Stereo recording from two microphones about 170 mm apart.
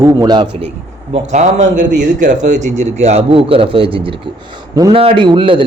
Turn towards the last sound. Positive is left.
turn(degrees=-30)  # may be behind; listen again after turning